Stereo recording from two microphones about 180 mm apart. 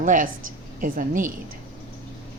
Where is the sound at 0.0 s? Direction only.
45° right (ahead or behind).